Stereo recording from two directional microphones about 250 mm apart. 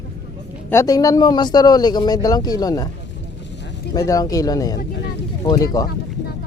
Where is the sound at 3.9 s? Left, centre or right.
Centre.